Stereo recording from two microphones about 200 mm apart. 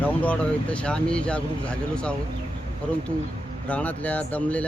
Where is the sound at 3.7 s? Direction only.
5° left (ahead or behind).